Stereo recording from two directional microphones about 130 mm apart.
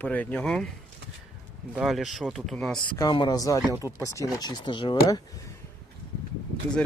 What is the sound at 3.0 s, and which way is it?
Speech, 35° left (ahead or behind).